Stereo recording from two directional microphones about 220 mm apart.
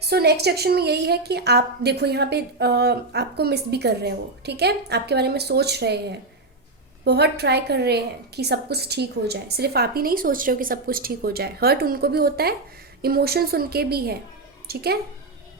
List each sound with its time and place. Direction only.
0.0 s a woman's voice: 45° right (ahead or behind)